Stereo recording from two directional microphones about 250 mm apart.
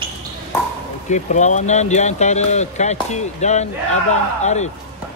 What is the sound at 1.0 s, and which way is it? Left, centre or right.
Speech, left.